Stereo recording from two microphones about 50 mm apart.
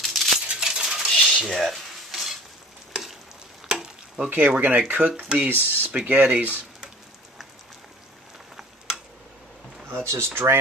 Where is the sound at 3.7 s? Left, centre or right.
Centre.